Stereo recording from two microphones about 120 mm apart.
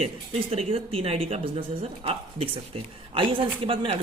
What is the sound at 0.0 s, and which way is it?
Speech, 50° right (ahead or behind).